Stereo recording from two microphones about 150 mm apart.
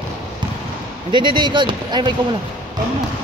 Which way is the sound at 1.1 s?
30° right (ahead or behind).